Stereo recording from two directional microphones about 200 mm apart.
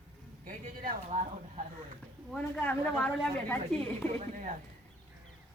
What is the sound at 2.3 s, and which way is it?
A woman's voice, 5° left (ahead or behind).